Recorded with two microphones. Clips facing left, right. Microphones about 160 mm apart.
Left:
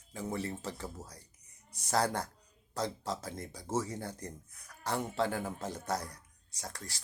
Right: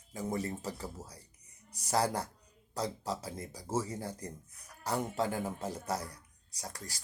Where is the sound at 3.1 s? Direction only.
10° right (ahead or behind).